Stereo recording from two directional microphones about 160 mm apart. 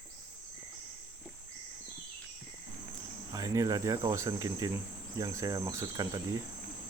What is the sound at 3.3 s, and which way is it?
Cricket, 20° right (ahead or behind).